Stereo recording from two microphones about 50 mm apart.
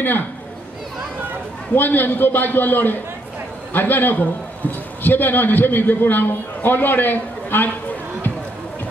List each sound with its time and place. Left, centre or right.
1.8 s a man's voice: left